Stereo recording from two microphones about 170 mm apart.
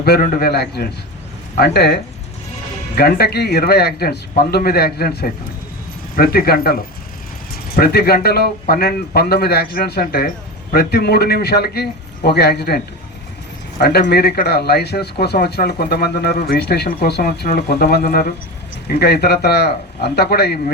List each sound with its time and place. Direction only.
0.0 s speech: 60° left (ahead or behind)
14.1 s speech: 70° left (ahead or behind)